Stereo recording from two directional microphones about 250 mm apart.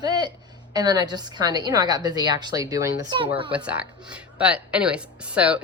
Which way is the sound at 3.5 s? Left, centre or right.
Centre.